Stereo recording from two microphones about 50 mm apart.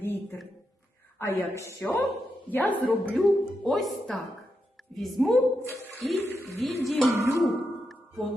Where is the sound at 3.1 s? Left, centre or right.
Centre.